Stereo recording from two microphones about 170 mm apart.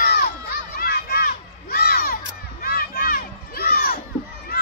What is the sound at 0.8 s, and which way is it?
Crowd, 60° left (ahead or behind).